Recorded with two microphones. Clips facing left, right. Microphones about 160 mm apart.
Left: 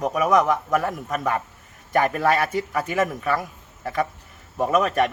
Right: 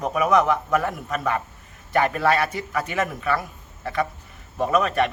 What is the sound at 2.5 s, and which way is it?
Speech, 40° left (ahead or behind).